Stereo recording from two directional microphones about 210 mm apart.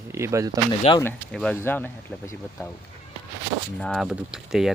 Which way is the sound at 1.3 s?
5° left (ahead or behind).